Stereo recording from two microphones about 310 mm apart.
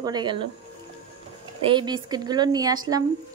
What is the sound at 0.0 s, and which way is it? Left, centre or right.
Speech, centre.